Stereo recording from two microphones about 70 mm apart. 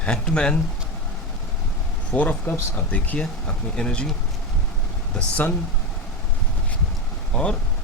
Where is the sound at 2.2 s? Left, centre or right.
Left.